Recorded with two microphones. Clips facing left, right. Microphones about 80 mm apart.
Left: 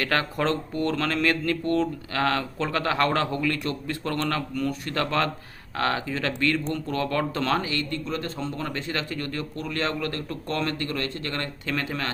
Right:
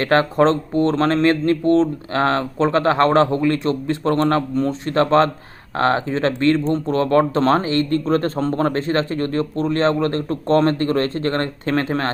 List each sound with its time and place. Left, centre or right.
0.0 s speech: right